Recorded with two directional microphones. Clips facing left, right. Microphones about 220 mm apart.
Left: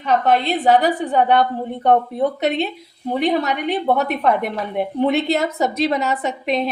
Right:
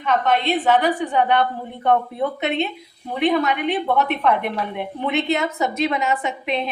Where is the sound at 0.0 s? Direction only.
35° left (ahead or behind).